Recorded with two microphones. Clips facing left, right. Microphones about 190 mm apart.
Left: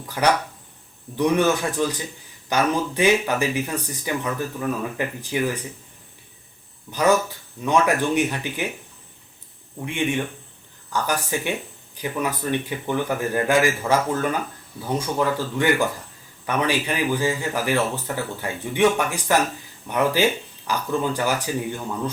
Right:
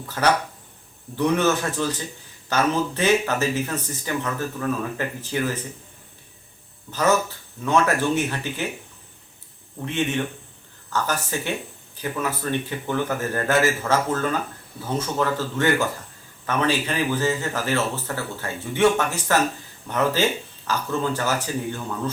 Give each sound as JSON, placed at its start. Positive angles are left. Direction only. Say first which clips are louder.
{"t": 0.2, "sound": "a man's voice", "louder": "left 1 dB", "side_deg": 10}
{"t": 7.6, "sound": "a man's voice", "louder": "left 1 dB", "side_deg": 15}
{"t": 9.8, "sound": "a man's voice", "louder": "even", "side_deg": 15}